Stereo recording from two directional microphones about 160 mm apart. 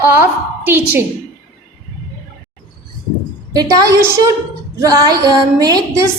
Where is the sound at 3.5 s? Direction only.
20° right (ahead or behind).